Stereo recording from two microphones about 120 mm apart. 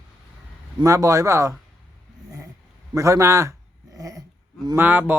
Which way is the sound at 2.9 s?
25° right (ahead or behind).